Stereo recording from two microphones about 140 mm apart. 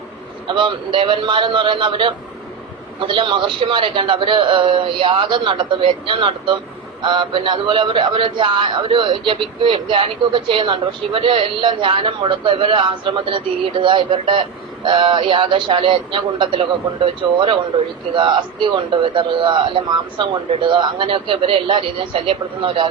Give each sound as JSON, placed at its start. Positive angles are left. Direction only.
{"t": 0.4, "sound": "a man's voice", "side_deg": -35}